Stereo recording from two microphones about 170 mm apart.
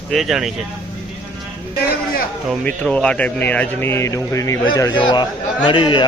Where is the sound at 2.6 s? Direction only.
5° left (ahead or behind).